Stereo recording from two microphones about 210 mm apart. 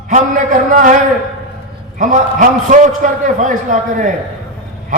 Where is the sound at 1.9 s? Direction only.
40° right (ahead or behind).